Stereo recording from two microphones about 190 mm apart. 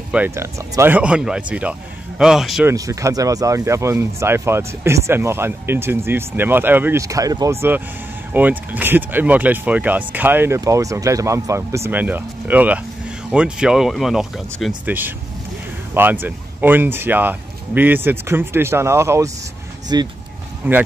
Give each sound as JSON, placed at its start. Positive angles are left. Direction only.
{"t": 0.1, "sound": "speech", "side_deg": -10}
{"t": 2.6, "sound": "speech", "side_deg": -15}
{"t": 20.6, "sound": "speech", "side_deg": -10}